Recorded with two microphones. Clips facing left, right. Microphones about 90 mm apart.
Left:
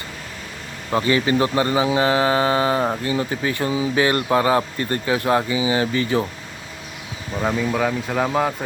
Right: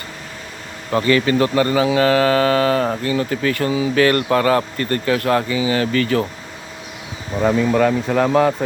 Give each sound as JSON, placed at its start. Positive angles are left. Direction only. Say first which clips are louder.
{"t": 0.9, "sound": "speech", "louder": "right 3 dB", "side_deg": 20}
{"t": 7.4, "sound": "speech", "louder": "right 6 dB", "side_deg": 0}